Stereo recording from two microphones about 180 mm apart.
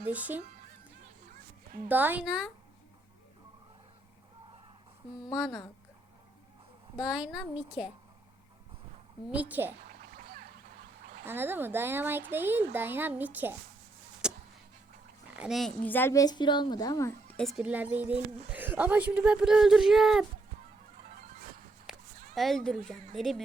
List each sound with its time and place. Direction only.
0.0 s speech: 10° right (ahead or behind)
1.9 s speech: 10° right (ahead or behind)
5.3 s a woman's voice: centre (ahead or behind)
7.0 s a woman's voice: 5° right (ahead or behind)
9.3 s speech: 10° right (ahead or behind)
9.8 s duck: 55° right (ahead or behind)
11.3 s speech: 10° right (ahead or behind)
14.2 s a sound: 5° right (ahead or behind)
15.3 s speech: 5° right (ahead or behind); by 17.4 s 10° left (ahead or behind)
17.4 s speech: 5° right (ahead or behind)
21.9 s a sound: 5° right (ahead or behind)
22.4 s a woman's voice: centre (ahead or behind)